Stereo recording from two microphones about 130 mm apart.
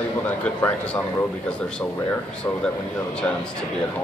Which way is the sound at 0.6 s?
10° left (ahead or behind).